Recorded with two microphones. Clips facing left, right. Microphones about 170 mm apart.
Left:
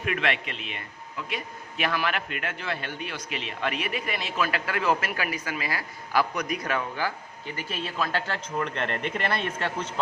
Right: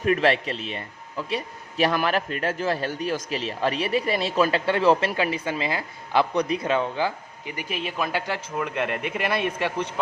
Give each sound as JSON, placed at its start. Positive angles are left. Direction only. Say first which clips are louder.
{"t": 0.0, "sound": "a man's voice", "louder": "right 7 dB", "side_deg": -35}